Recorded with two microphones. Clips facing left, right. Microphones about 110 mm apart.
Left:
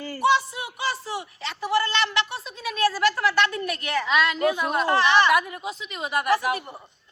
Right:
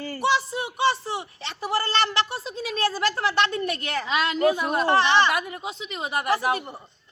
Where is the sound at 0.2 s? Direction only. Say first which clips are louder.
Left 2 dB; 30° right (ahead or behind).